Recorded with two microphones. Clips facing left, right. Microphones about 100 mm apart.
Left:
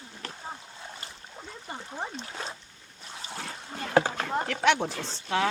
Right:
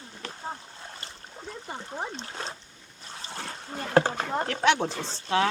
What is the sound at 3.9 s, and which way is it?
Rowboat, 30° right (ahead or behind).